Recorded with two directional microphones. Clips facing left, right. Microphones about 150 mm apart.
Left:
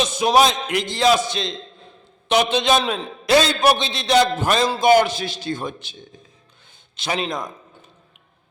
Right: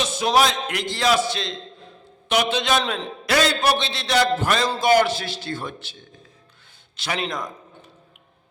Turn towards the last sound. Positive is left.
turn(degrees=20)  # may be behind; listen again after turning